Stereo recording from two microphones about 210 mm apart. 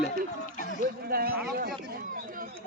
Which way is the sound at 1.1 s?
45° right (ahead or behind).